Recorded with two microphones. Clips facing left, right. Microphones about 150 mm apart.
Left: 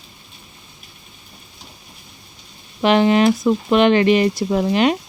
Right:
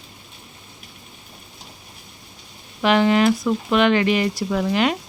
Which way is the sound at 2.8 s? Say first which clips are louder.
Left 2 dB; 25° left (ahead or behind).